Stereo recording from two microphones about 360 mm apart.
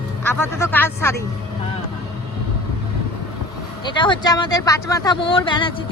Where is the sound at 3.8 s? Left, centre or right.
Centre.